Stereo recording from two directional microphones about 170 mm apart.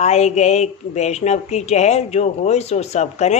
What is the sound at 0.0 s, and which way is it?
A woman's voice, 40° left (ahead or behind).